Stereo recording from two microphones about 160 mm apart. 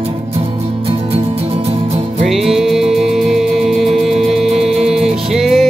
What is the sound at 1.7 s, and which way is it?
Music, 40° right (ahead or behind).